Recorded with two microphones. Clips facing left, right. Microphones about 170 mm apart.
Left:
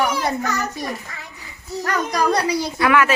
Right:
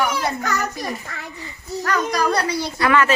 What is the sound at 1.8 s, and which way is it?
Speech, 20° left (ahead or behind).